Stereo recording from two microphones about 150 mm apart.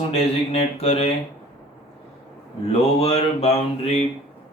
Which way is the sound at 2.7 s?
45° left (ahead or behind).